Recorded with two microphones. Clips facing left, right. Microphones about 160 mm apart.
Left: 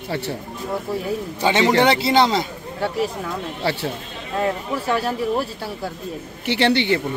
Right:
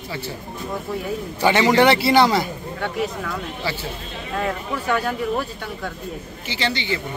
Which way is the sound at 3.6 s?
65° left (ahead or behind).